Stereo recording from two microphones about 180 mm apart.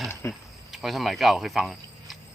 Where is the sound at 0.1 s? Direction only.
15° left (ahead or behind).